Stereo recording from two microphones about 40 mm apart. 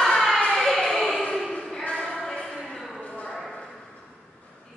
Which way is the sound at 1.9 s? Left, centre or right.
Centre.